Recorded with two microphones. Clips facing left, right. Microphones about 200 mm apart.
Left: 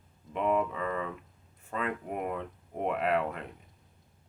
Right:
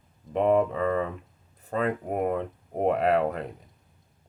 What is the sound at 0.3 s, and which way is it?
Speech, 40° right (ahead or behind).